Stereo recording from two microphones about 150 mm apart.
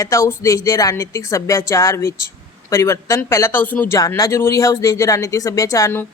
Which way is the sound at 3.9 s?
20° left (ahead or behind).